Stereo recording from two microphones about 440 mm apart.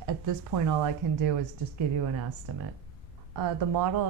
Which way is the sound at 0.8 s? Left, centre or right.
Right.